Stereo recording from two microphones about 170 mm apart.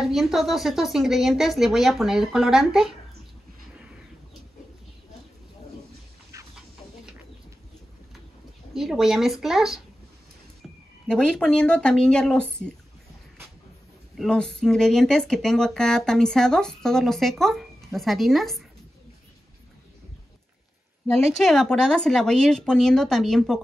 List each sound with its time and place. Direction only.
0.0 s speech: centre (ahead or behind)
6.3 s chicken: 20° right (ahead or behind)
8.7 s speech: centre (ahead or behind)
11.1 s speech: 5° left (ahead or behind)
14.1 s speech: 5° left (ahead or behind)
21.1 s speech: centre (ahead or behind)